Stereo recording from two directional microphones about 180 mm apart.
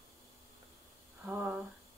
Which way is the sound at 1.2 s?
5° right (ahead or behind).